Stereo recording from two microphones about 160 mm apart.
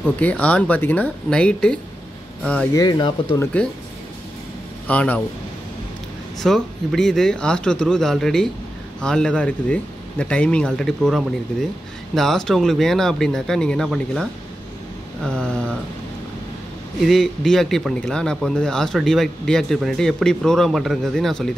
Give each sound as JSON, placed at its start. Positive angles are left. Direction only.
{"t": 0.0, "sound": "speech", "side_deg": 10}
{"t": 2.7, "sound": "speech", "side_deg": 25}
{"t": 4.8, "sound": "speech", "side_deg": 10}
{"t": 6.4, "sound": "a man's voice", "side_deg": 0}
{"t": 17.0, "sound": "a man's voice", "side_deg": 0}